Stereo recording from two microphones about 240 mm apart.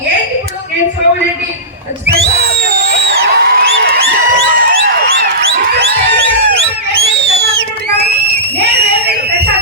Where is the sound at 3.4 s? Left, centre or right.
Right.